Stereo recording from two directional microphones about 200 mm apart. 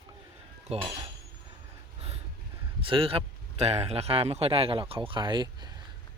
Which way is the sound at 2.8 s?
25° right (ahead or behind).